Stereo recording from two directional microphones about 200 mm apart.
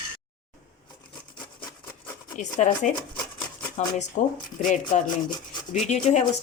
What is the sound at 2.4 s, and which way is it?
Speech, 35° left (ahead or behind).